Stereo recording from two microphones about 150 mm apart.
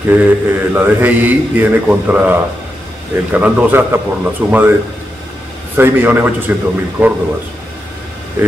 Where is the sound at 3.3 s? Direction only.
10° right (ahead or behind).